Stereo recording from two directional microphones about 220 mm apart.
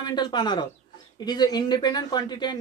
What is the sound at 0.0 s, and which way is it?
Speech, 20° left (ahead or behind).